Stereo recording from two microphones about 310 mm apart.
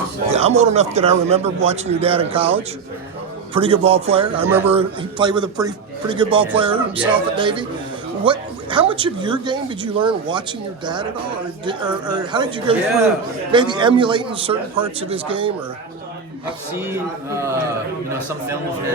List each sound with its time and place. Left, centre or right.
0.3 s a man's voice: centre
4.4 s speech: centre
4.7 s speech: centre
11.6 s speech: centre